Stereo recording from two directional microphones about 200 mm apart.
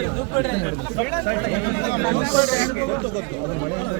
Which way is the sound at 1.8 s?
55° left (ahead or behind).